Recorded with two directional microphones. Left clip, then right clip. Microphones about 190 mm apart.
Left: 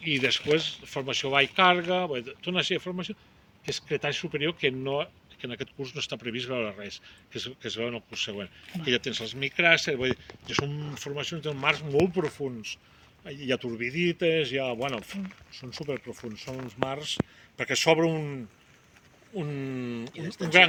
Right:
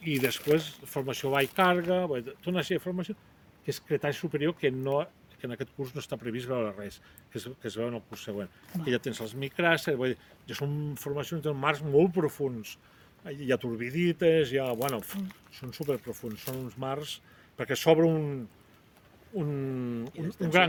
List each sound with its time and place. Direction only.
0.0 s speech: 65° right (ahead or behind); by 18.3 s 40° right (ahead or behind)
19.4 s speech: 40° right (ahead or behind)